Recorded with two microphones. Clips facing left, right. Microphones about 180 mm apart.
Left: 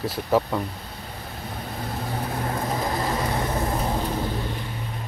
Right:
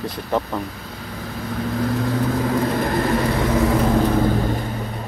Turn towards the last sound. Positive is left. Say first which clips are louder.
# right 9 dB
turn(degrees=-90)